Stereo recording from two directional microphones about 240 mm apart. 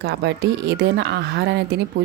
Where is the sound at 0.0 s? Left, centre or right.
Right.